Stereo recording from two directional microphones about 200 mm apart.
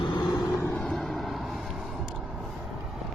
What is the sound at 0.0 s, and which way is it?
Vehicle, 20° left (ahead or behind).